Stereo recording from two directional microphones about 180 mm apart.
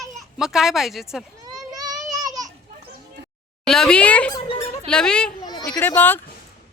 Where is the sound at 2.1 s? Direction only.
20° right (ahead or behind).